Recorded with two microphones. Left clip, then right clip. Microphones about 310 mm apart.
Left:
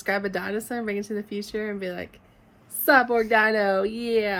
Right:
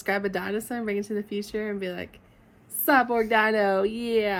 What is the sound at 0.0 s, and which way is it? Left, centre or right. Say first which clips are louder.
A woman's voice: left 1 dB; centre.